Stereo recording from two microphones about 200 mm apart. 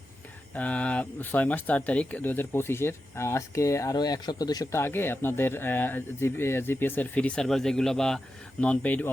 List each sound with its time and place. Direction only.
0.5 s speech: 5° left (ahead or behind)